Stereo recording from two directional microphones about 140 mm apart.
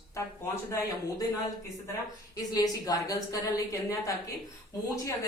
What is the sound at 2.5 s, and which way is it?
A woman's voice, 25° left (ahead or behind).